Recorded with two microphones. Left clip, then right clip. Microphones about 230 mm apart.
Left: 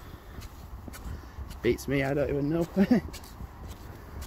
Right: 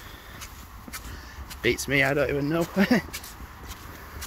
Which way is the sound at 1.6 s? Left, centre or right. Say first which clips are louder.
Right 5 dB; centre.